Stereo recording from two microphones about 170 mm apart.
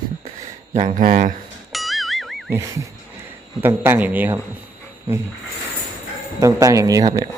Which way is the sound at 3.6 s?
10° right (ahead or behind).